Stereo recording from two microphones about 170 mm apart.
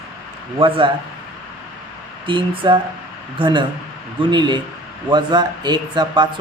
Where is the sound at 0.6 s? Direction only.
30° right (ahead or behind).